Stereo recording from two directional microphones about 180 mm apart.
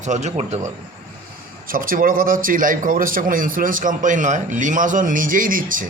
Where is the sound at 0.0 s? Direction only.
40° right (ahead or behind).